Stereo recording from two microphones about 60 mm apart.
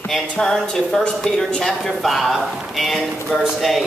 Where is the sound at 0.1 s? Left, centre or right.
Centre.